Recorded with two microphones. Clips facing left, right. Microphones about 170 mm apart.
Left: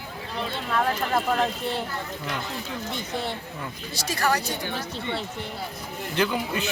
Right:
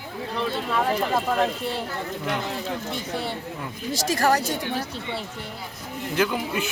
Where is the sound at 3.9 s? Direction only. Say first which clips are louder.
Right 4 dB; 45° right (ahead or behind).